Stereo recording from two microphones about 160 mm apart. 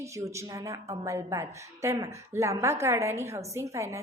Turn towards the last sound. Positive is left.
turn(degrees=-20)  # may be behind; listen again after turning